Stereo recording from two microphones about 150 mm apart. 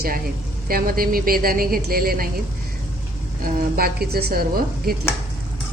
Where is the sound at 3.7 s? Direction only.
85° right.